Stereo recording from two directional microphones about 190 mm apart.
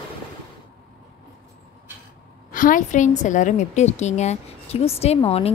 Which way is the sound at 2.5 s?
45° left (ahead or behind).